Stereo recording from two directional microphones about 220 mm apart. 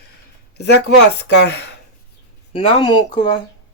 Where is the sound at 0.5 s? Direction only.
50° left (ahead or behind).